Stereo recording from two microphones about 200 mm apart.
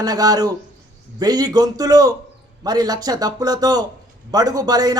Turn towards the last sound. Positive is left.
turn(degrees=-20)  # may be behind; listen again after turning